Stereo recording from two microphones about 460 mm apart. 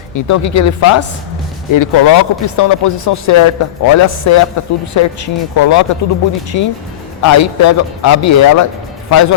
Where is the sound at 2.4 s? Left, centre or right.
Left.